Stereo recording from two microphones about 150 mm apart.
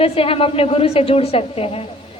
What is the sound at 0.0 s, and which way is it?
A woman's voice, 40° left (ahead or behind).